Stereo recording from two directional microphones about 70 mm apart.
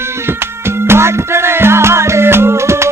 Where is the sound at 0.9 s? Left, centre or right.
Right.